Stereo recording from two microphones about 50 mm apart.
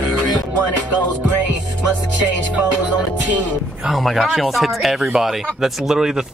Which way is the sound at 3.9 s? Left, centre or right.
Centre.